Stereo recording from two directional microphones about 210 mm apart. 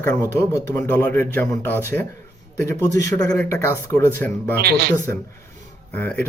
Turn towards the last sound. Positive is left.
turn(degrees=5)  # may be behind; listen again after turning